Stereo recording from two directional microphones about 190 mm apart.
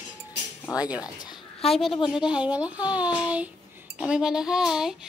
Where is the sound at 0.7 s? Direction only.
20° left (ahead or behind).